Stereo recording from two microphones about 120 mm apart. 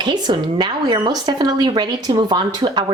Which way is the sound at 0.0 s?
40° right (ahead or behind).